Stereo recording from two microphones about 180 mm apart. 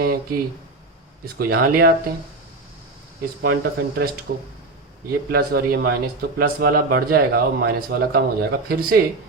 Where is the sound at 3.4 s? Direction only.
60° right (ahead or behind).